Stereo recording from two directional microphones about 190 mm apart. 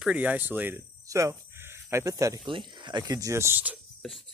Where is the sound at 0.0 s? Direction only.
5° right (ahead or behind).